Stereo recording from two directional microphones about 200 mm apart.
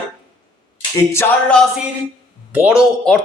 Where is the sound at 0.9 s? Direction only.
10° left (ahead or behind).